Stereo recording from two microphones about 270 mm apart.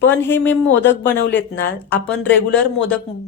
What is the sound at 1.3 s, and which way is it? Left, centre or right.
Speech, left.